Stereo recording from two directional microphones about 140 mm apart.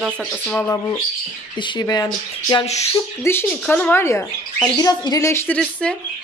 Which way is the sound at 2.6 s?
50° left (ahead or behind).